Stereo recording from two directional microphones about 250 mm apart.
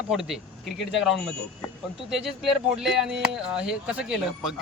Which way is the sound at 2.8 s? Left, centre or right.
Centre.